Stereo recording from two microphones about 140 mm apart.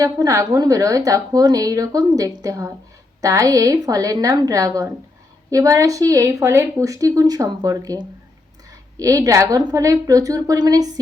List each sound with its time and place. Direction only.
0.0 s a woman's voice: 25° right (ahead or behind)